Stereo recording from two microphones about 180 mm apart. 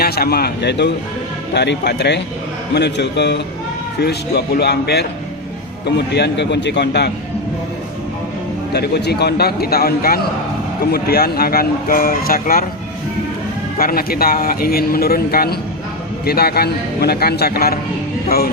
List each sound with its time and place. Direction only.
0.0 s a man's voice: 60° left (ahead or behind)
8.7 s a man's voice: 65° left (ahead or behind)
13.7 s a man's voice: 55° left (ahead or behind)